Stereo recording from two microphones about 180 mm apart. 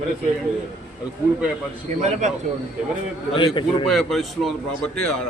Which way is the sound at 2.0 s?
40° right (ahead or behind).